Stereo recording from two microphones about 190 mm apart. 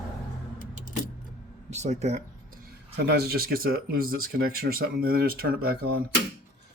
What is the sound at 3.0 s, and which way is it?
Speech, 60° right (ahead or behind).